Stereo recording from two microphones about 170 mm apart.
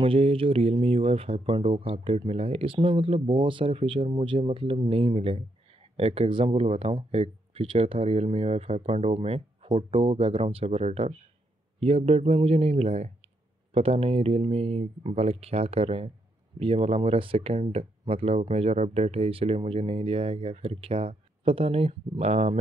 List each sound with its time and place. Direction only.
0.0 s speech: 30° right (ahead or behind)